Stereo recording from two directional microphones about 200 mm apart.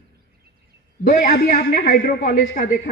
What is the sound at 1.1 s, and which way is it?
A man's voice, 50° left (ahead or behind).